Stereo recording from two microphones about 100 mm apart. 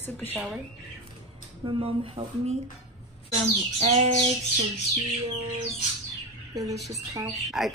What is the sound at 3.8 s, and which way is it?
Bird, 90° right.